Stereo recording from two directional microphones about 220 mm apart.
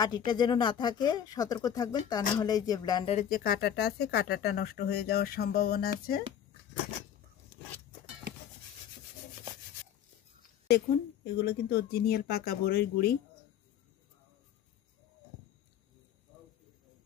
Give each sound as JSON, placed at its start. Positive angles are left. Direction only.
{"t": 0.0, "sound": "speech", "side_deg": 20}
{"t": 3.2, "sound": "speech", "side_deg": 40}
{"t": 11.4, "sound": "speech", "side_deg": 45}